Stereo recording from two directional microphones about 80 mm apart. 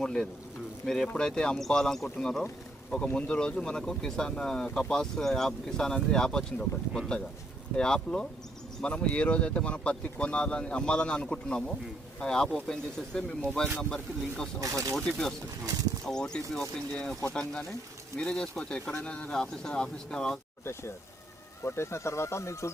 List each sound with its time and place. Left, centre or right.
0.0 s speech: centre
14.6 s speech: right
14.9 s speech: centre
21.6 s speech: left